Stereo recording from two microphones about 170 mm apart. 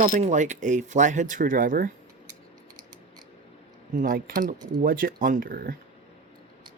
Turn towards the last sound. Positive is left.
turn(degrees=-60)  # may be behind; listen again after turning